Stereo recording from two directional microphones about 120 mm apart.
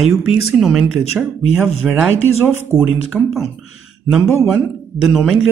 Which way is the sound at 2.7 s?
20° left (ahead or behind).